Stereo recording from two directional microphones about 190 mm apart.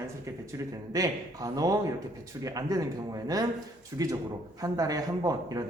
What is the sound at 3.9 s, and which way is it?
A man's voice, 15° right (ahead or behind).